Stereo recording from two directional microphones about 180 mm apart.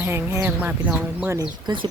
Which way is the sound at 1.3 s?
25° right (ahead or behind).